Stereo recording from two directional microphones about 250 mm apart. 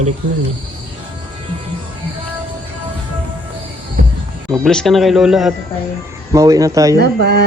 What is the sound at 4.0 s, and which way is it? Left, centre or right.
Music, right.